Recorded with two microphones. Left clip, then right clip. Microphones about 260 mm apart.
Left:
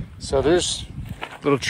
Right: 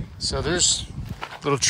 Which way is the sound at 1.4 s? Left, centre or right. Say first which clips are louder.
Left 1 dB; centre.